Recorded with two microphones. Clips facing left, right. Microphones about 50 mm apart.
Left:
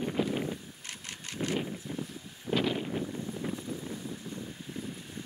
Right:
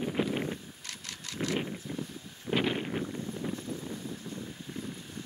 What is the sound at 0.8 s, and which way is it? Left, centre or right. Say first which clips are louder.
Vehicle: left 1 dB; left.